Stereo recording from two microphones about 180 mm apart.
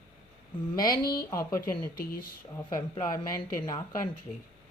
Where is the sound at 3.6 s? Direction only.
20° left (ahead or behind).